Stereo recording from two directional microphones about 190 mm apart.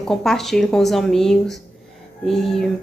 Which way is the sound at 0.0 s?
Centre (ahead or behind).